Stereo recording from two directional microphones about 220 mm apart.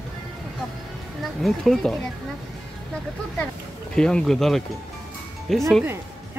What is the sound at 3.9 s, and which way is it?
Speech, 5° left (ahead or behind).